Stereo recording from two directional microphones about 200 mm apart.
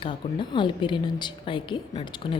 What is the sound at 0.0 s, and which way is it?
Speech, 25° left (ahead or behind).